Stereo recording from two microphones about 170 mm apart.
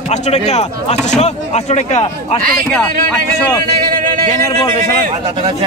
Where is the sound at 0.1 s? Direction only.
40° left (ahead or behind).